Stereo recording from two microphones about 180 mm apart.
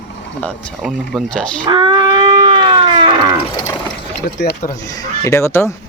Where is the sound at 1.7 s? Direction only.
25° right (ahead or behind).